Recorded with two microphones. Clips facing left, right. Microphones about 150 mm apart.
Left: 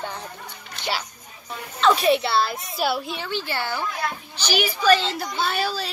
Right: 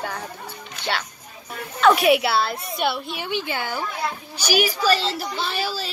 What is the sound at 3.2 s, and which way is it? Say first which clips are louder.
A woman's voice: right 1 dB; 15° right (ahead or behind).